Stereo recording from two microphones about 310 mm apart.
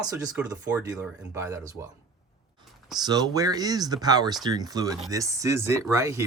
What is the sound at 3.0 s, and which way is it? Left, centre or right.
Speech, centre.